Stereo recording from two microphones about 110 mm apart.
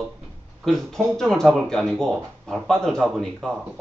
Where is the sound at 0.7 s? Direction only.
Centre (ahead or behind).